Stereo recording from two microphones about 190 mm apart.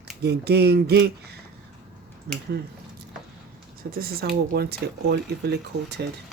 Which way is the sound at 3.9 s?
50° right (ahead or behind).